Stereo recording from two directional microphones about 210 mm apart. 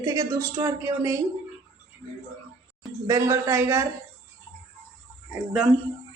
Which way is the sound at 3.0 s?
15° right (ahead or behind).